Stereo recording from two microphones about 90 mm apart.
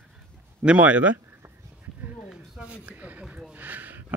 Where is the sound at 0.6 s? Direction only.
15° right (ahead or behind).